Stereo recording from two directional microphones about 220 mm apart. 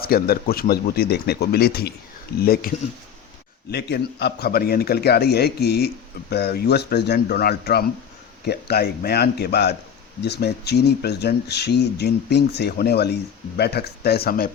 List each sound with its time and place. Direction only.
0.0 s speech: 45° left (ahead or behind)